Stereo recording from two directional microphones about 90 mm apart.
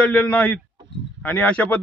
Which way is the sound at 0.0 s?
15° left (ahead or behind).